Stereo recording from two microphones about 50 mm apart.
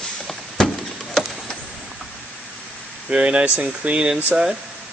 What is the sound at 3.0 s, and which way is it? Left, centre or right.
A man's voice, right.